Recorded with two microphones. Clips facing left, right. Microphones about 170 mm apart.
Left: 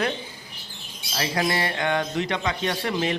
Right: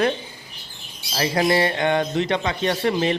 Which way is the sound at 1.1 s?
30° right (ahead or behind).